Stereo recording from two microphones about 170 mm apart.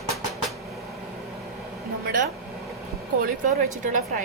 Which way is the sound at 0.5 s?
Centre (ahead or behind).